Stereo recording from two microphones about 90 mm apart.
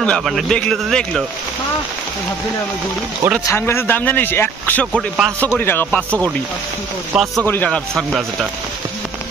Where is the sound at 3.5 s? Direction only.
30° left (ahead or behind).